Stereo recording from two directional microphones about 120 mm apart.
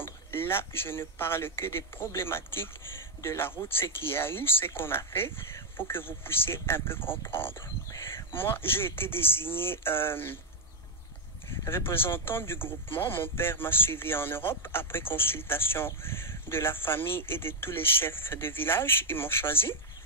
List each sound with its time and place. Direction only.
0.0 s speech: 20° left (ahead or behind)
11.6 s speech: 20° left (ahead or behind)